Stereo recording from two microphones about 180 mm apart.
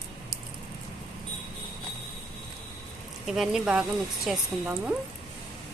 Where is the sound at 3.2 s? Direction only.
Centre (ahead or behind).